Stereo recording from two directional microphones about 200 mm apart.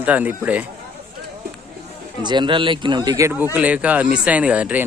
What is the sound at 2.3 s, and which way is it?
A man's voice, 25° right (ahead or behind).